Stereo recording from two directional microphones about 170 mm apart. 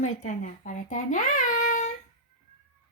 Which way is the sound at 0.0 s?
45° left (ahead or behind).